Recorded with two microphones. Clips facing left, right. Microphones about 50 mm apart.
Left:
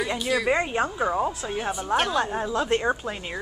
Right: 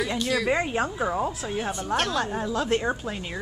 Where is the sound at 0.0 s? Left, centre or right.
Centre.